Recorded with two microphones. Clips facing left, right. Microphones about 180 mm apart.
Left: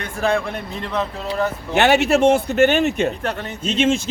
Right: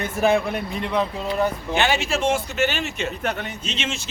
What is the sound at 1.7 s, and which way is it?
A man's voice, 65° left (ahead or behind).